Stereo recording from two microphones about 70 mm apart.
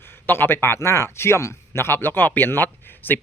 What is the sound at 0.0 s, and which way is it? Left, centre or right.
Speech, left.